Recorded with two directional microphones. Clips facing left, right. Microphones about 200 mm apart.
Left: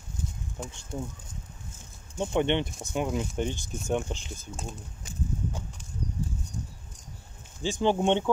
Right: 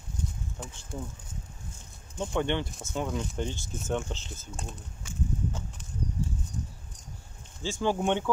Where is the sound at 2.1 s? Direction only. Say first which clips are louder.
Left 3 dB; 20° left (ahead or behind).